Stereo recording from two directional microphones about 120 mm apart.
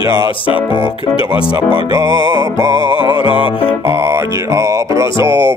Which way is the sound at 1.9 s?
35° right (ahead or behind).